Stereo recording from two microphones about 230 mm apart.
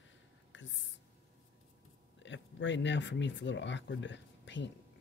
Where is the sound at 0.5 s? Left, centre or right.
Left.